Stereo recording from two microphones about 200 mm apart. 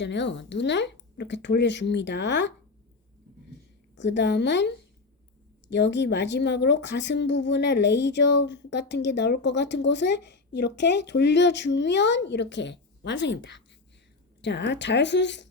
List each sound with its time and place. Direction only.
0.0 s a woman's voice: 65° left (ahead or behind)
3.9 s a woman's voice: 60° left (ahead or behind)